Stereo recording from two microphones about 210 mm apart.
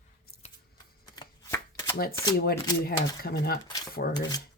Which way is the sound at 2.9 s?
45° left (ahead or behind).